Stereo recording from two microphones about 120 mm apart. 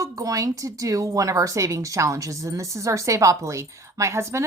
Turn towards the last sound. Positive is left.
turn(degrees=-25)  # may be behind; listen again after turning